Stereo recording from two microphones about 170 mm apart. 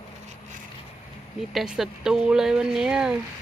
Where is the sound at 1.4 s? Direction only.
Centre (ahead or behind).